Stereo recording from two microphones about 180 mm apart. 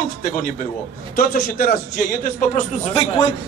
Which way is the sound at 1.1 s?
50° left (ahead or behind).